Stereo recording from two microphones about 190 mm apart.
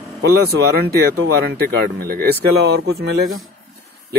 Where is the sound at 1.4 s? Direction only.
55° right (ahead or behind); by 3.4 s 75° right (ahead or behind).